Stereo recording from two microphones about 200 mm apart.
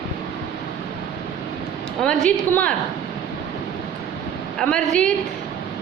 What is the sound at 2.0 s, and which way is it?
Speech, 5° left (ahead or behind).